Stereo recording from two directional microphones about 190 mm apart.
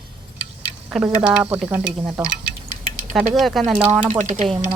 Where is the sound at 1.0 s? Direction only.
10° right (ahead or behind).